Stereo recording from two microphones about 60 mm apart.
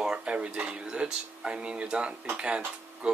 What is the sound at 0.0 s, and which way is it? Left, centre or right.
Speech, centre.